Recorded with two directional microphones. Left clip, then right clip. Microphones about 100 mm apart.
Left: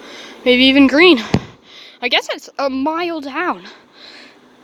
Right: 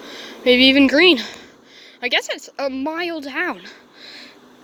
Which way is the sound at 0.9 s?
25° left (ahead or behind).